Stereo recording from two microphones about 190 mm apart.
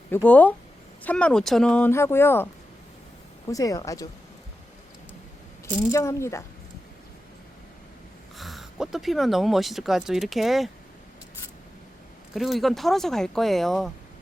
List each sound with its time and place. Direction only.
0.3 s speech: 10° left (ahead or behind)
3.5 s speech: 20° left (ahead or behind)
5.6 s speech: 15° left (ahead or behind)
8.4 s speech: centre (ahead or behind)
12.3 s speech: centre (ahead or behind)